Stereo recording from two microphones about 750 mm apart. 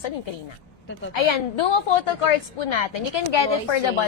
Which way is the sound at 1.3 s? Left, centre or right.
Left.